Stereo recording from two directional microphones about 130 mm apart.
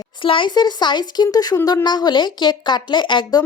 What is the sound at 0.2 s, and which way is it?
Speech, 40° left (ahead or behind).